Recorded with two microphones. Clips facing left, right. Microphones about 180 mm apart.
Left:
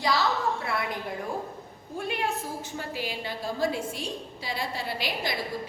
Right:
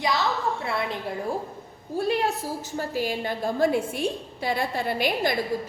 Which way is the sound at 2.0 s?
35° right (ahead or behind).